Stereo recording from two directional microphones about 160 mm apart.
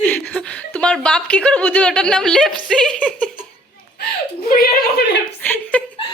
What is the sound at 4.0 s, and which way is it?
Whimper, 75° left (ahead or behind).